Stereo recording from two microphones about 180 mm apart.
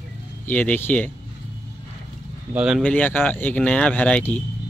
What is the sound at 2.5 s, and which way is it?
Speech, 5° right (ahead or behind).